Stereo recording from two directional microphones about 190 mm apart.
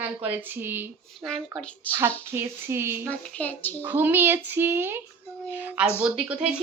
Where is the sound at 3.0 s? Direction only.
5° left (ahead or behind).